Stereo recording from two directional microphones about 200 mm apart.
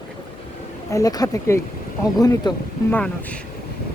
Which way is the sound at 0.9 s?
15° left (ahead or behind).